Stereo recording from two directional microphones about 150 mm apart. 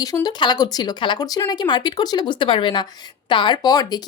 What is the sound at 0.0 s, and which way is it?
Speech, 25° left (ahead or behind).